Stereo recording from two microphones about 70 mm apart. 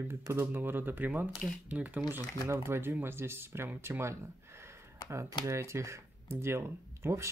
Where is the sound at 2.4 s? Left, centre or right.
Right.